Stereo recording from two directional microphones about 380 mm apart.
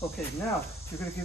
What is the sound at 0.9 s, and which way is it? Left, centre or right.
Speech, centre.